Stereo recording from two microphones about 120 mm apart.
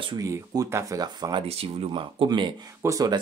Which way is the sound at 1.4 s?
55° right (ahead or behind).